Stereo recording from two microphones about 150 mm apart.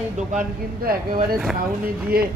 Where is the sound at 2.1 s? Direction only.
90° right.